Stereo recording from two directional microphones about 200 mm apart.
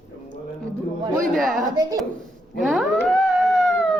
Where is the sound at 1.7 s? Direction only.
20° right (ahead or behind).